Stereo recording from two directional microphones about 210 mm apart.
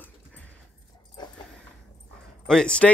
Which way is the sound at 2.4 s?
5° left (ahead or behind).